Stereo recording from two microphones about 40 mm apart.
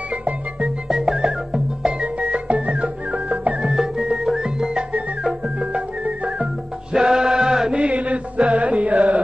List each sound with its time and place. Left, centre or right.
0.8 s music: centre
2.0 s music: right
3.6 s music: centre
5.6 s music: right; by 7.7 s centre
7.7 s chant: right